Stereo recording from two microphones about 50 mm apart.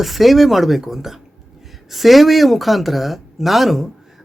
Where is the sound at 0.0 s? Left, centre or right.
Centre.